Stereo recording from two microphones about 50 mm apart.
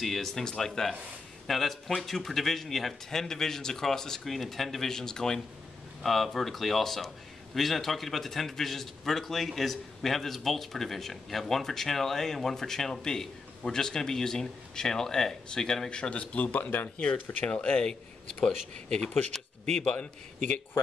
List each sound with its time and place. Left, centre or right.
0.0 s a man's voice: centre; by 17.8 s left
18.4 s a man's voice: centre